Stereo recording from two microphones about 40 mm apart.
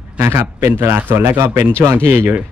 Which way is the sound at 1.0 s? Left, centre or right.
Right.